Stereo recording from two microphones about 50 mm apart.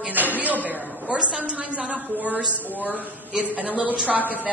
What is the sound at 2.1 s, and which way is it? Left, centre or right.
A woman's voice, right.